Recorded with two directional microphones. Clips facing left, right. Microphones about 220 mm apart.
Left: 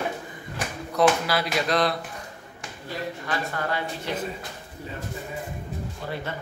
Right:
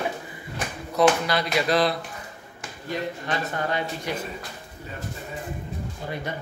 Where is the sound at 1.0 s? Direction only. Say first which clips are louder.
Right 1 dB; centre (ahead or behind).